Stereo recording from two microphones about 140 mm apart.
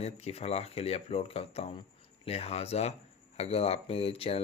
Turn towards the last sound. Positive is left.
turn(degrees=45)  # may be behind; listen again after turning